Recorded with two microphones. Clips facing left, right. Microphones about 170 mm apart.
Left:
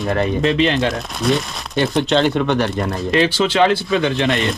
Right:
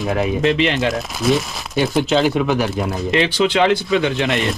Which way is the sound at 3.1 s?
20° right (ahead or behind).